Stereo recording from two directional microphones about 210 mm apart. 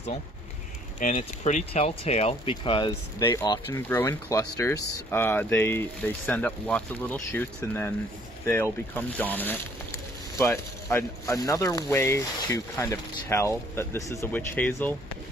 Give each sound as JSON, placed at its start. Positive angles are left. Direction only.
{"t": 0.9, "sound": "speech", "side_deg": 35}
{"t": 9.0, "sound": "speech", "side_deg": 10}